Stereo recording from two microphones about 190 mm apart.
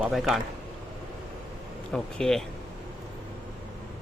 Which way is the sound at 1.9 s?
5° left (ahead or behind).